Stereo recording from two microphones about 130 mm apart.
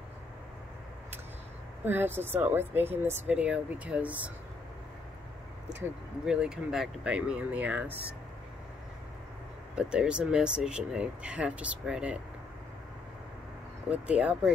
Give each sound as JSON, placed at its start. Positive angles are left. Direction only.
{"t": 1.9, "sound": "speech", "side_deg": -15}
{"t": 6.2, "sound": "speech", "side_deg": -5}
{"t": 9.8, "sound": "speech", "side_deg": -5}
{"t": 13.8, "sound": "speech", "side_deg": -10}